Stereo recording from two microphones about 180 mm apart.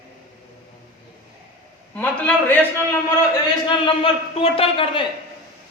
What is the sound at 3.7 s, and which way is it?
Speech, 30° left (ahead or behind).